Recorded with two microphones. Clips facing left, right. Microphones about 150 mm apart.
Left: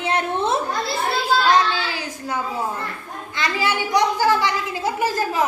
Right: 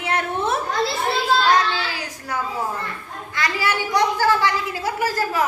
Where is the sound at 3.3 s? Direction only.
20° left (ahead or behind).